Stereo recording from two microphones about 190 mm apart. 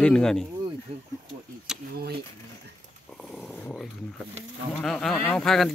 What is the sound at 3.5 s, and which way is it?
Dog, 5° left (ahead or behind).